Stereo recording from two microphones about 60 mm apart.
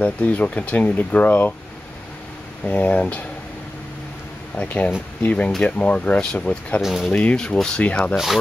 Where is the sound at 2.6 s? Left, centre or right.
Left.